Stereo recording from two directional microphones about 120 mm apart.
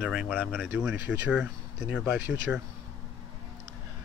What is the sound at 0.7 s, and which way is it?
Speech, 10° right (ahead or behind).